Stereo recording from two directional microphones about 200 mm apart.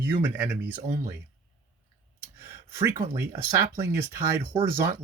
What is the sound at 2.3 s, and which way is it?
Speech, 10° right (ahead or behind).